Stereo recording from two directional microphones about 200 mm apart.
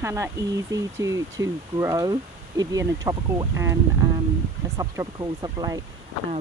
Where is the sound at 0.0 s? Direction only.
15° right (ahead or behind).